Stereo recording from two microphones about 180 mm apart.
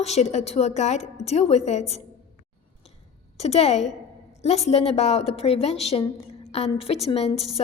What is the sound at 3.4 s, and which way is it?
A woman's voice, 35° left (ahead or behind).